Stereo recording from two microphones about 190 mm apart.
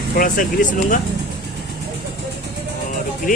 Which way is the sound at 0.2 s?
45° left (ahead or behind).